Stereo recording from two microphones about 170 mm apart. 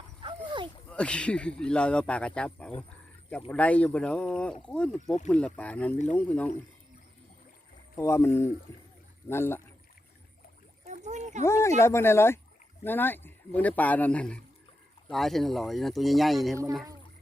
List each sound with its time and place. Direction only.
0.2 s dog: 30° right (ahead or behind)
0.9 s speech: 5° left (ahead or behind)
7.9 s speech: 15° left (ahead or behind)
10.8 s a sound: 45° right (ahead or behind)
11.4 s a sound: 15° left (ahead or behind)
11.8 s speech: 15° left (ahead or behind)